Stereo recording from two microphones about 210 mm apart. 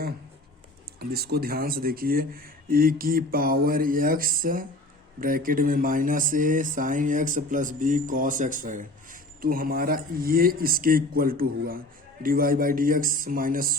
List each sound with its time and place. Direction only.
0.9 s speech: 50° right (ahead or behind)